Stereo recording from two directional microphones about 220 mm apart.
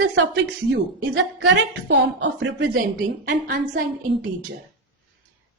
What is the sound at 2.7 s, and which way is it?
A woman's voice, 40° right (ahead or behind).